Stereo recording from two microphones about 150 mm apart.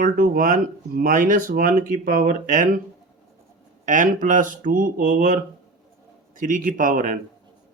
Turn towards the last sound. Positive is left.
turn(degrees=-60)  # may be behind; listen again after turning